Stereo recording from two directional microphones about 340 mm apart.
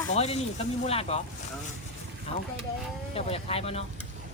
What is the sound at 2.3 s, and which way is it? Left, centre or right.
Speech, centre.